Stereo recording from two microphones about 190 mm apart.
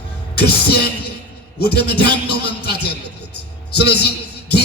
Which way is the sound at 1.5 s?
55° left (ahead or behind).